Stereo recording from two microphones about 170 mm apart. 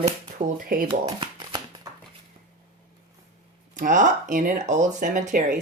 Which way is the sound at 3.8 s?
50° right (ahead or behind).